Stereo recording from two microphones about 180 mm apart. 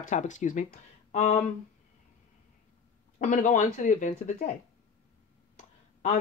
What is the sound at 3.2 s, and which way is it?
Speech, 45° left (ahead or behind).